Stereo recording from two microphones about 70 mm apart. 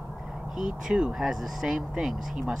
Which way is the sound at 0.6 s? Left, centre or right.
Centre.